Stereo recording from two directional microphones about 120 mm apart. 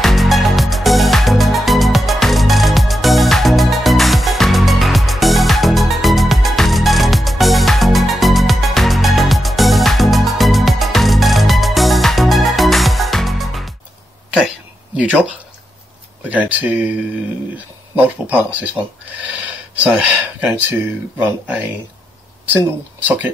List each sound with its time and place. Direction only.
0.0 s music: centre (ahead or behind)
15.0 s speech: 10° right (ahead or behind)
17.9 s speech: 15° right (ahead or behind)
19.7 s speech: 10° right (ahead or behind)